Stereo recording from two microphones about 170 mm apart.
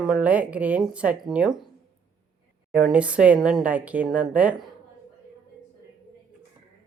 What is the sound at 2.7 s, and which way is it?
A woman's voice, 5° right (ahead or behind).